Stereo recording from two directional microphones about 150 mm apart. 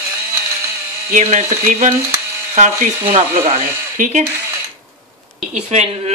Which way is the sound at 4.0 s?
65° right (ahead or behind).